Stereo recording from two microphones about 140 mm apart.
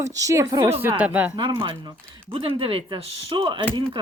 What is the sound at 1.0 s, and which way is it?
Speech, 10° right (ahead or behind).